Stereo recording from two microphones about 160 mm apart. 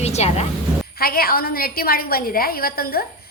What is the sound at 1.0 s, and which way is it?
A woman's voice, 70° left (ahead or behind).